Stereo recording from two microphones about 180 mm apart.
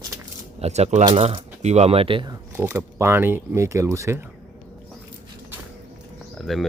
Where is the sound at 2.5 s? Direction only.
10° right (ahead or behind).